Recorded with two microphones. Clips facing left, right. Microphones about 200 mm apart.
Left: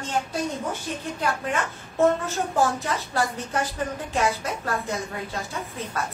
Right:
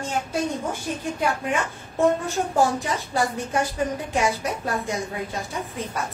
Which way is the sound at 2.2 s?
15° right (ahead or behind).